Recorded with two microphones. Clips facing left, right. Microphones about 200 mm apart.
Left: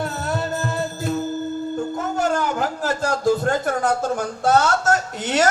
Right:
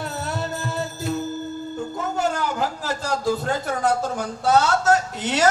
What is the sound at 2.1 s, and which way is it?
A man's voice, 50° left (ahead or behind).